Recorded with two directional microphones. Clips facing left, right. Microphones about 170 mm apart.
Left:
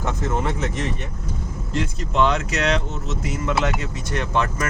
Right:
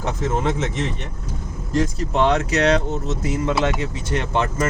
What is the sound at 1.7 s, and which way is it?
Speech, 40° right (ahead or behind).